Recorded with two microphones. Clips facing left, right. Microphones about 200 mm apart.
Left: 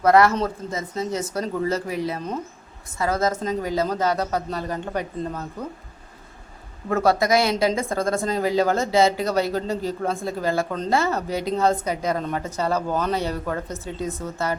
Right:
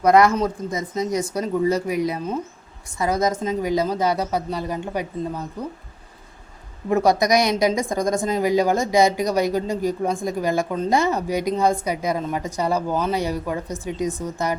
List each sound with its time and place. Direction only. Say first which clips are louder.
0.0 s speech: right 1 dB; 15° right (ahead or behind)
6.9 s speech: right 2 dB; 15° right (ahead or behind)